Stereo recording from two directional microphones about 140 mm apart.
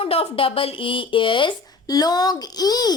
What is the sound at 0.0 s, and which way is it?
Speech, 40° left (ahead or behind).